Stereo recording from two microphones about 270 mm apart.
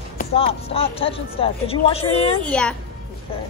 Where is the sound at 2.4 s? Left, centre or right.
Centre.